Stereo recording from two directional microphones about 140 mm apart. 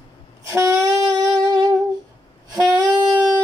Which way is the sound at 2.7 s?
30° right (ahead or behind).